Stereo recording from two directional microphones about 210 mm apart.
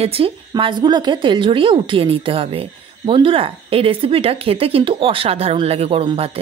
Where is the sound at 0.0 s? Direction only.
25° right (ahead or behind).